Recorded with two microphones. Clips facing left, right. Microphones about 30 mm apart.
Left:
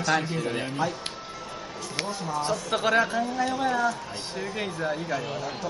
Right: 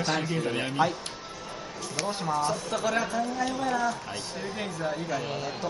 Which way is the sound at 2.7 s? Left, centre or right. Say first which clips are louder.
Left 5 dB; left.